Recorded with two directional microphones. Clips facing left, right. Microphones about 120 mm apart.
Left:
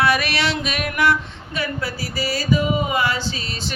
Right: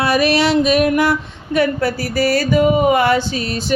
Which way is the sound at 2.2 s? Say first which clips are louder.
Right 7 dB; 65° right (ahead or behind).